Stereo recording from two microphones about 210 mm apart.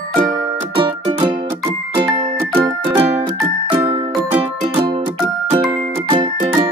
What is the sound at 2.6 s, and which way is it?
Music, 15° right (ahead or behind).